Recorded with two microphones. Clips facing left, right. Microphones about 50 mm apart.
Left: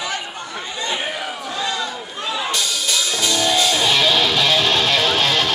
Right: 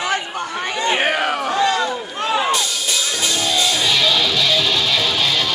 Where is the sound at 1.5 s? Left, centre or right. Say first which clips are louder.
Right 6 dB; right.